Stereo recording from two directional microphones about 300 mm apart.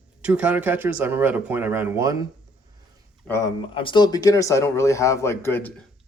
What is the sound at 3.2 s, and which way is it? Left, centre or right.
Speech, centre.